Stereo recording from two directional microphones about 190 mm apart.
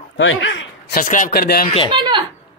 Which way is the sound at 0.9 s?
45° left (ahead or behind).